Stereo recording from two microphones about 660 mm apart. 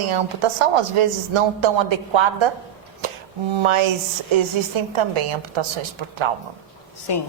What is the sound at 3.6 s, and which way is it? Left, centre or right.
A woman's voice, right.